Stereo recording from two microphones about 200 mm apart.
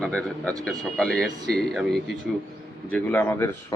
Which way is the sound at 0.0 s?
5° left (ahead or behind).